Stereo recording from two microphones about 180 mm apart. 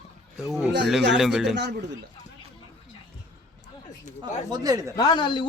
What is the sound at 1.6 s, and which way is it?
Speech, 70° right (ahead or behind).